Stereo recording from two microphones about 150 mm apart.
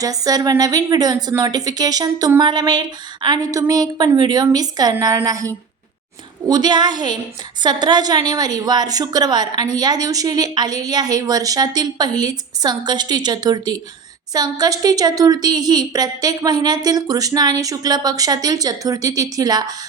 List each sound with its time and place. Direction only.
0.0 s a woman's voice: 25° right (ahead or behind)
6.5 s a woman's voice: 30° right (ahead or behind)